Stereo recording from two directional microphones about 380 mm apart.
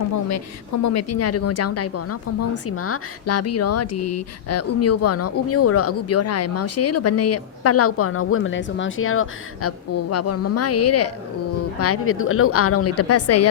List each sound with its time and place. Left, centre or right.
0.1 s speech: left